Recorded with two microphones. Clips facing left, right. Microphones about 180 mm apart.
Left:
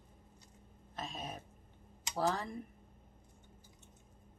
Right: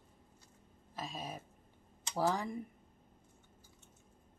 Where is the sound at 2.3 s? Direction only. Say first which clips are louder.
Right 2 dB; 10° right (ahead or behind).